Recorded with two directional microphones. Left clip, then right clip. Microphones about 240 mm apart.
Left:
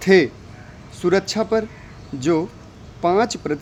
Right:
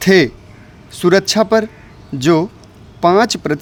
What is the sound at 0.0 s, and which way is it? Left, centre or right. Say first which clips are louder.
A man's voice: right 3 dB; right.